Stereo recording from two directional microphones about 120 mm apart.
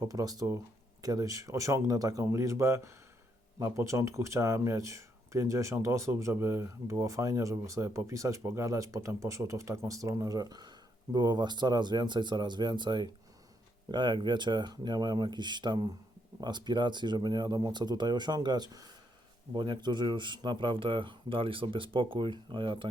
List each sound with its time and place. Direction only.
0.0 s speech: 30° right (ahead or behind)